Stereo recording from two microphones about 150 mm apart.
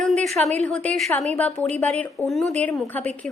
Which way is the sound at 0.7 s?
10° left (ahead or behind).